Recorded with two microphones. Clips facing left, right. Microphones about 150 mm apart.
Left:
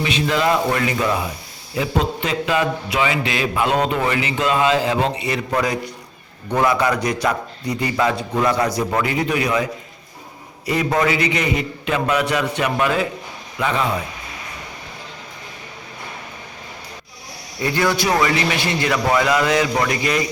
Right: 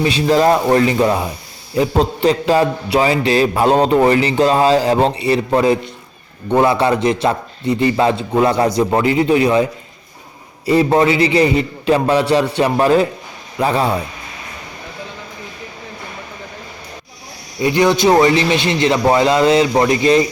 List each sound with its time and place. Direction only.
0.0 s a man's voice: 35° right (ahead or behind)
10.7 s a man's voice: 30° right (ahead or behind)
17.6 s a man's voice: 20° right (ahead or behind)